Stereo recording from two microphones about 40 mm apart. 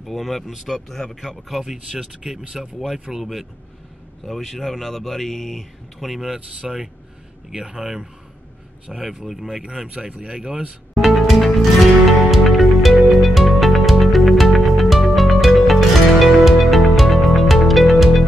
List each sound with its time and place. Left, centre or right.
0.0 s speech: centre
1.9 s speech: right
2.6 s speech: centre
9.6 s speech: centre
11.0 s music: centre